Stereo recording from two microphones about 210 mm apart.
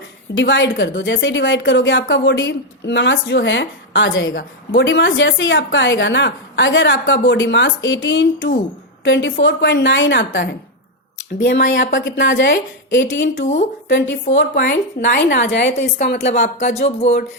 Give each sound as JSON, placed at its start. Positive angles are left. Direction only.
{"t": 0.3, "sound": "a woman's voice", "side_deg": 60}
{"t": 13.4, "sound": "speech", "side_deg": 35}
{"t": 13.8, "sound": "a woman's voice", "side_deg": 60}
{"t": 15.8, "sound": "speech", "side_deg": 35}